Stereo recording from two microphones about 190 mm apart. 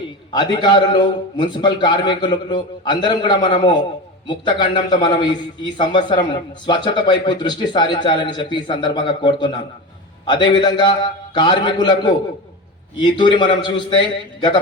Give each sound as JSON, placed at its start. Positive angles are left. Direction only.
{"t": 0.3, "sound": "speech", "side_deg": 25}